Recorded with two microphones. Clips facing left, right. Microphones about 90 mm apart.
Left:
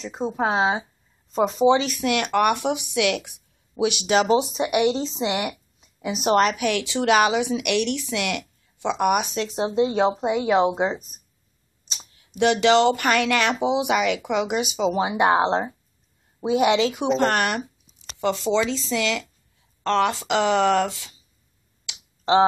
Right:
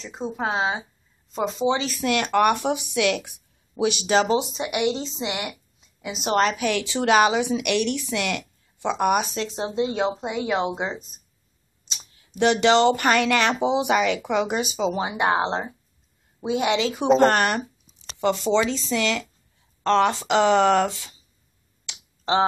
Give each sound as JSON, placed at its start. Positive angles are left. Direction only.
{"t": 0.0, "sound": "speech", "side_deg": 15}
{"t": 4.1, "sound": "speech", "side_deg": 5}
{"t": 4.6, "sound": "a woman's voice", "side_deg": 20}
{"t": 6.6, "sound": "speech", "side_deg": 5}
{"t": 9.6, "sound": "speech", "side_deg": 20}
{"t": 12.4, "sound": "a woman's voice", "side_deg": 10}
{"t": 16.7, "sound": "speech", "side_deg": 0}
{"t": 18.6, "sound": "speech", "side_deg": -15}
{"t": 18.9, "sound": "speech", "side_deg": 5}
{"t": 20.5, "sound": "speech", "side_deg": -5}